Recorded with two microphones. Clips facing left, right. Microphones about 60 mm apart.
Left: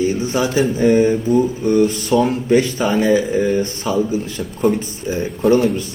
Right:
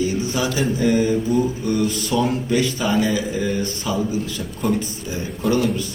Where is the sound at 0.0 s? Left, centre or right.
Left.